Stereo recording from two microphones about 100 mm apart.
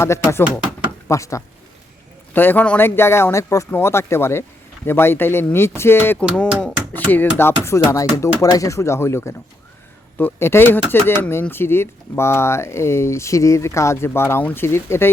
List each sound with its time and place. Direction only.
0.0 s speech: 25° left (ahead or behind)
2.3 s speech: 20° left (ahead or behind)